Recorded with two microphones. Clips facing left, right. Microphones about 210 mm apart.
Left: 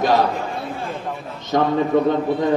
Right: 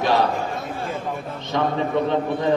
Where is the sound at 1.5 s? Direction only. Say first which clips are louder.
Left 4 dB; 45° left (ahead or behind).